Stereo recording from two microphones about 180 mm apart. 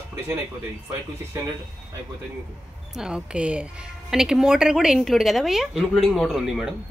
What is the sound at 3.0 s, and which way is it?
A man's voice, 5° right (ahead or behind).